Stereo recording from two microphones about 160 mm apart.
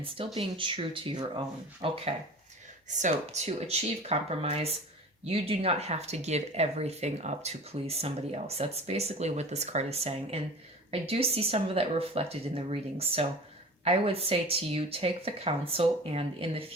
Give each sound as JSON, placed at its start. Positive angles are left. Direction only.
{"t": 0.3, "sound": "speech", "side_deg": -35}
{"t": 2.9, "sound": "speech", "side_deg": -45}